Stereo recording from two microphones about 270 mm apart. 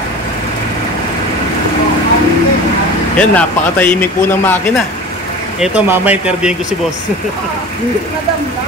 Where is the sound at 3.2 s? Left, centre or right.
Centre.